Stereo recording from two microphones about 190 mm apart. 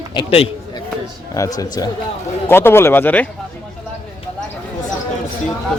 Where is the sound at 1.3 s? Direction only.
15° left (ahead or behind).